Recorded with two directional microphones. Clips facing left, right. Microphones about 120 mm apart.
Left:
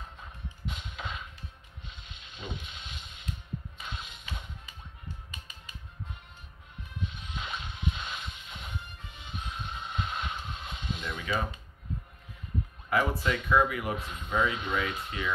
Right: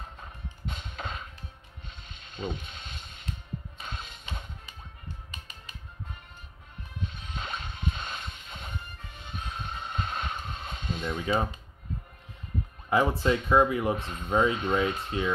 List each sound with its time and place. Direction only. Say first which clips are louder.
0.7 s music: right 2 dB; 40° right (ahead or behind)
1.9 s mechanisms: right 1 dB; 45° right (ahead or behind)
3.8 s music: right 1 dB; 45° right (ahead or behind)
7.2 s music: right 2 dB; 45° right (ahead or behind)
12.9 s speech: right 4 dB; 25° right (ahead or behind)
14.0 s speech: right 2 dB; 40° right (ahead or behind)